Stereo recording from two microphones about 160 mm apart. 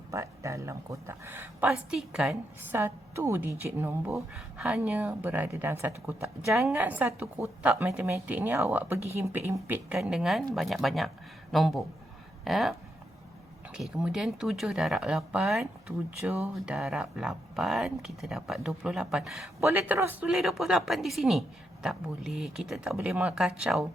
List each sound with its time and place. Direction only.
0.1 s a woman's voice: 20° right (ahead or behind); by 12.7 s centre (ahead or behind)
13.7 s speech: 5° right (ahead or behind)